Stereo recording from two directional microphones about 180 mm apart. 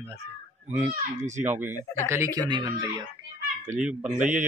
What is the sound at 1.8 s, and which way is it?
Speech, 15° left (ahead or behind).